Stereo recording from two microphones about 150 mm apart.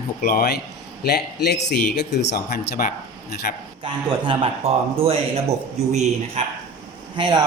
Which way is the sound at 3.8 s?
35° right (ahead or behind).